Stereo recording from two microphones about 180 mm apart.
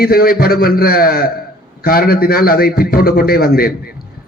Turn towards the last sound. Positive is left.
turn(degrees=55)  # may be behind; listen again after turning